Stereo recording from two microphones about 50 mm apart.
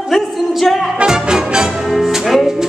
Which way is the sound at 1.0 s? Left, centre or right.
Centre.